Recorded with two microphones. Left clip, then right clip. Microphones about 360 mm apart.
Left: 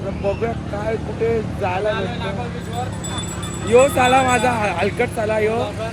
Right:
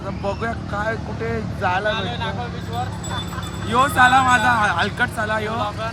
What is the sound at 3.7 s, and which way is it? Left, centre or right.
Speech, centre.